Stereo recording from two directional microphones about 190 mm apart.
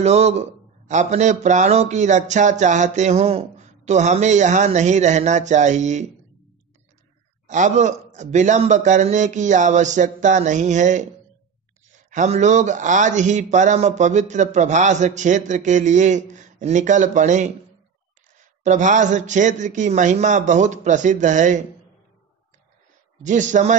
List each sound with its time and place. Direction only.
0.0 s a man's voice: 35° right (ahead or behind)
7.4 s a man's voice: 40° right (ahead or behind)
12.1 s a man's voice: 40° right (ahead or behind)
18.6 s a man's voice: 40° right (ahead or behind)
23.2 s a man's voice: 40° right (ahead or behind)